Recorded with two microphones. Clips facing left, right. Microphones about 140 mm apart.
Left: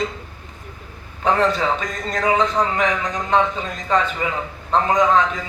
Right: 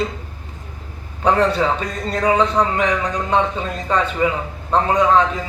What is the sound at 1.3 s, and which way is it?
A man's voice, 35° right (ahead or behind).